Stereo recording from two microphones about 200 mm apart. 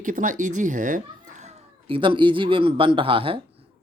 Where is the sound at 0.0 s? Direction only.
40° right (ahead or behind).